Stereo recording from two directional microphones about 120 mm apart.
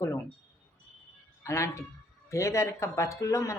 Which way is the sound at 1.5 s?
25° left (ahead or behind).